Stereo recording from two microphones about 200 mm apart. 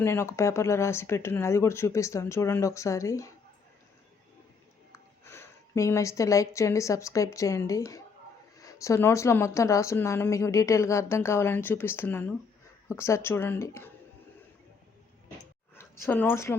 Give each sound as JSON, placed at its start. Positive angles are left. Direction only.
{"t": 0.0, "sound": "speech", "side_deg": 10}
{"t": 4.9, "sound": "a woman's voice", "side_deg": 10}
{"t": 15.7, "sound": "speech", "side_deg": 10}